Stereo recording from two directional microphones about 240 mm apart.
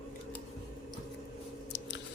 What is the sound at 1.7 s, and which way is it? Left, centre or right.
Chewing, left.